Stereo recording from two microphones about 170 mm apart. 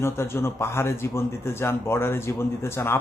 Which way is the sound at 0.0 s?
15° left (ahead or behind).